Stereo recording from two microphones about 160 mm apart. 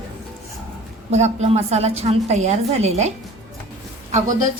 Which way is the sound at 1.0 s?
45° right (ahead or behind).